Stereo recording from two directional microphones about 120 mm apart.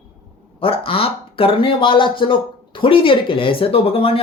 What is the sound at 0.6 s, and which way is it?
Speech, 50° left (ahead or behind).